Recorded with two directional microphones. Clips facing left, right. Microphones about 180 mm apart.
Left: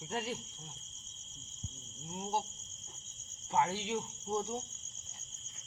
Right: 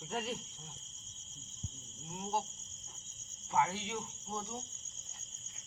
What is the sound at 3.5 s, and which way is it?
Speech, 30° left (ahead or behind).